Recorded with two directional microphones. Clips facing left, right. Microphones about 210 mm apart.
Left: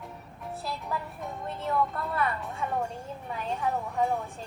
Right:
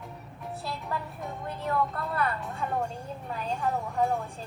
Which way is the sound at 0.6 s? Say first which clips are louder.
Even; centre (ahead or behind).